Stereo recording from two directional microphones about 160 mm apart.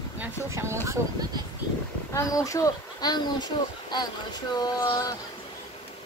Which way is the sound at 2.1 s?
20° left (ahead or behind).